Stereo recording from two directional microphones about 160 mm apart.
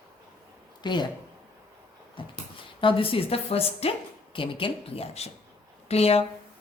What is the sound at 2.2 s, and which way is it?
Speech, 30° left (ahead or behind).